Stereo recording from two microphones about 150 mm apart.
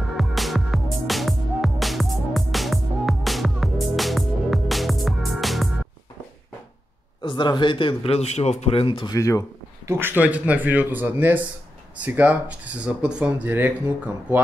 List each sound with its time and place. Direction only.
0.2 s music: centre (ahead or behind)
7.2 s a man's voice: 30° left (ahead or behind)
9.1 s speech: 20° left (ahead or behind)
9.8 s speech: 15° right (ahead or behind)